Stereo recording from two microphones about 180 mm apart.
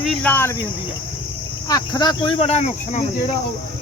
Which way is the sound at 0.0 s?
5° left (ahead or behind).